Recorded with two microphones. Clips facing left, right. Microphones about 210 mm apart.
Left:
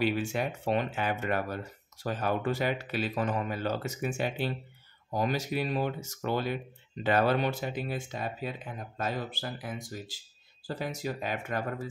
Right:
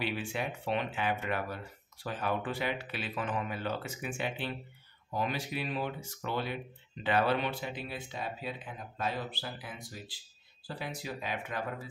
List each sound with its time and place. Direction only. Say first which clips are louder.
0.0 s speech: left 6 dB; 45° left (ahead or behind)